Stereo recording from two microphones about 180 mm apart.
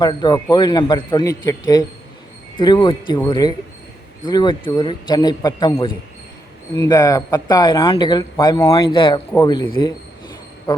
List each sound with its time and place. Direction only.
0.0 s a man's voice: 25° left (ahead or behind)